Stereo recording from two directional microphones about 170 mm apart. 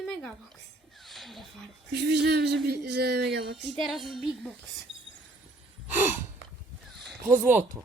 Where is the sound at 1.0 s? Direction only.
Centre (ahead or behind).